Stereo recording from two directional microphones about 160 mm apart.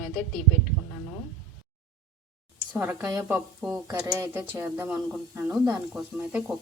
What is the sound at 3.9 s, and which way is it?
Speech, 25° right (ahead or behind).